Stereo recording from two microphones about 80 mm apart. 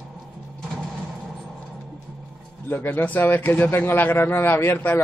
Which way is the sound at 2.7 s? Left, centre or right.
Left.